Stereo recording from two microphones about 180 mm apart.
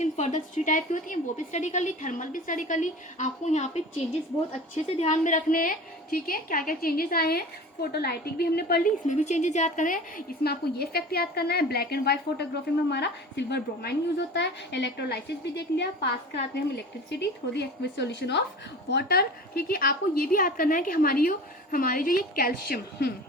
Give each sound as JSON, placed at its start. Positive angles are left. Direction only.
{"t": 0.0, "sound": "a woman's voice", "side_deg": 40}
{"t": 4.9, "sound": "a woman's voice", "side_deg": 40}
{"t": 18.9, "sound": "a woman's voice", "side_deg": 65}